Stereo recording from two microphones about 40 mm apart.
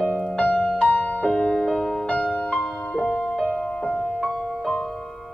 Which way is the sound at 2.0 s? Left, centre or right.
Left.